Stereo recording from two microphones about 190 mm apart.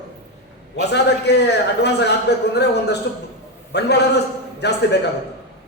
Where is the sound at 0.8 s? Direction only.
60° left (ahead or behind).